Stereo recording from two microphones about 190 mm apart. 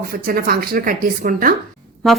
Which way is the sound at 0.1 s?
50° right (ahead or behind).